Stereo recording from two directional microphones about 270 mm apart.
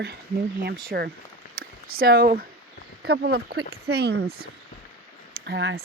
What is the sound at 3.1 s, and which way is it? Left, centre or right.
Speech, right.